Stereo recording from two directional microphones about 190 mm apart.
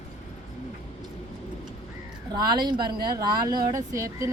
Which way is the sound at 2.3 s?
25° right (ahead or behind).